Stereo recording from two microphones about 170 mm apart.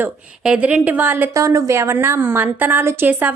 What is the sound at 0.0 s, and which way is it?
Speech, 5° right (ahead or behind).